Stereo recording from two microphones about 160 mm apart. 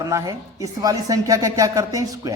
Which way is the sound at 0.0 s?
20° right (ahead or behind).